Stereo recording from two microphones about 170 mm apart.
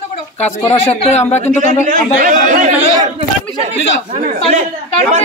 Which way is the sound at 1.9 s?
55° right (ahead or behind).